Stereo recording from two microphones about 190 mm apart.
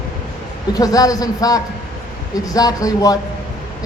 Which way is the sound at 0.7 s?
20° left (ahead or behind).